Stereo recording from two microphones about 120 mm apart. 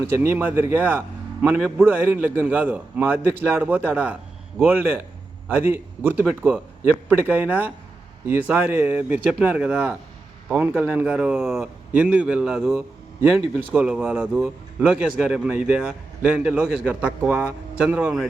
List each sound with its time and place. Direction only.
0.0 s a man's voice: 20° right (ahead or behind)